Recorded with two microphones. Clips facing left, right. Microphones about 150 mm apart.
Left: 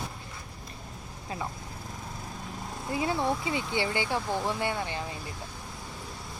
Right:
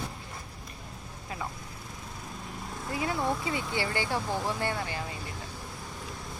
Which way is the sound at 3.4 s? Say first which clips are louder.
Left 2 dB; 20° left (ahead or behind).